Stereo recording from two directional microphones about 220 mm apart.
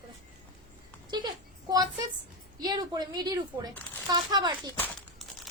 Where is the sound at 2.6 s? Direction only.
20° right (ahead or behind).